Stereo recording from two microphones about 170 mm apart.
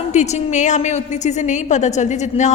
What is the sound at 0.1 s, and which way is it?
A woman's voice, 45° left (ahead or behind).